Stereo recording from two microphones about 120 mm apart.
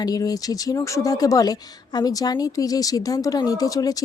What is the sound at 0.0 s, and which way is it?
A woman's voice, 30° left (ahead or behind).